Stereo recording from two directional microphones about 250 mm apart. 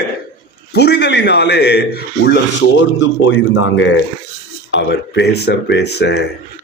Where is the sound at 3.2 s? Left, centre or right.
Left.